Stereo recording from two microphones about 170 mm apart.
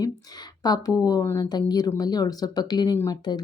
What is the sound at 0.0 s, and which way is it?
A woman's voice, 25° left (ahead or behind).